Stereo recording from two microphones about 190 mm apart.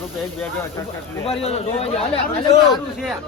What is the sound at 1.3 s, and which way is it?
Speech, 30° left (ahead or behind).